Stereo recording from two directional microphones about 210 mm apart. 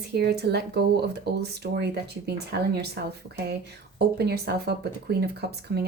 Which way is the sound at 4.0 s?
50° right (ahead or behind).